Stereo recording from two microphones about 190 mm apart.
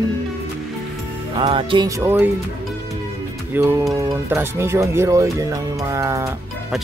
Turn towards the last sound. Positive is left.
turn(degrees=-15)  # may be behind; listen again after turning